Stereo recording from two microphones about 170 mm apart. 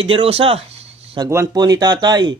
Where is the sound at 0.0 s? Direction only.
35° right (ahead or behind).